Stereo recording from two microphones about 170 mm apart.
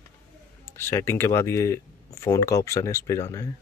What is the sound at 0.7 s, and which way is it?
Speech, 15° left (ahead or behind).